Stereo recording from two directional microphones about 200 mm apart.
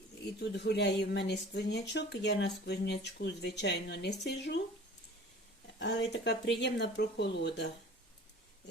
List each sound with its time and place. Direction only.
0.3 s speech: 55° left (ahead or behind)
5.8 s speech: 60° left (ahead or behind)